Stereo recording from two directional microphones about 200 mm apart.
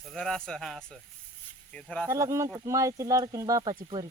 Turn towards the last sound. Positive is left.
turn(degrees=-15)  # may be behind; listen again after turning